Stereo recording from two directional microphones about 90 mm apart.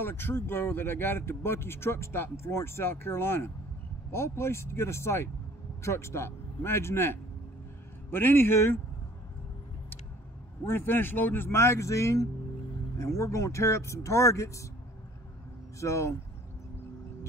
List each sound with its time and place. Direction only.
0.0 s speech: 25° left (ahead or behind)
10.6 s speech: 25° left (ahead or behind)
15.8 s speech: 35° left (ahead or behind)